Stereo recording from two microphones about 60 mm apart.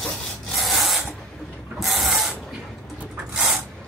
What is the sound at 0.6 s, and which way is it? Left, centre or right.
Rub, centre.